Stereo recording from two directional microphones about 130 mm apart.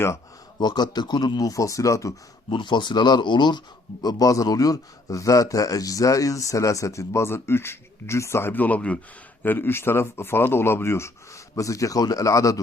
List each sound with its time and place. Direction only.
0.6 s a man's voice: 35° left (ahead or behind)
2.5 s a man's voice: 35° left (ahead or behind)